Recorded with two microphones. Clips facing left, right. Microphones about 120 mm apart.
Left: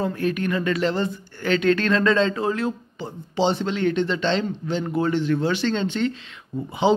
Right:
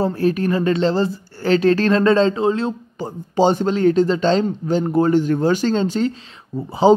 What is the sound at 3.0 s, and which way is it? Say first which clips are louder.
Speech: right 6 dB; 45° right (ahead or behind).